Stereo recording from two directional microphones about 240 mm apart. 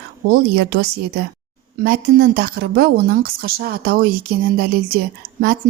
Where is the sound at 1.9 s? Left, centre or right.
Right.